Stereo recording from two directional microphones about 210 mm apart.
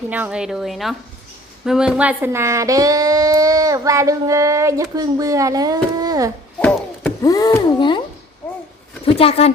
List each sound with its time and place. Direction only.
0.1 s a woman's voice: 5° right (ahead or behind)
6.6 s speech: 5° left (ahead or behind); by 8.0 s 20° left (ahead or behind)
9.0 s speech: 30° left (ahead or behind)